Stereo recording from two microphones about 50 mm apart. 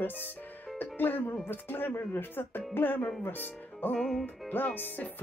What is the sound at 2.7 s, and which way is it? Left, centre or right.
Speech, left.